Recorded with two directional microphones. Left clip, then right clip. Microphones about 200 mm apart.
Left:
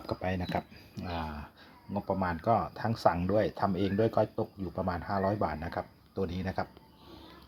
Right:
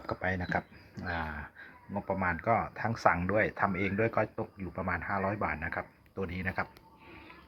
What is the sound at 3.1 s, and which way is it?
Speech, 10° right (ahead or behind).